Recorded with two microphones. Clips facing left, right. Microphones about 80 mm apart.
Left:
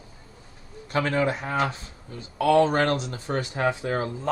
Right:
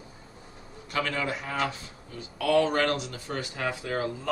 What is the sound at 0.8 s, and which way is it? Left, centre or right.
Speech, left.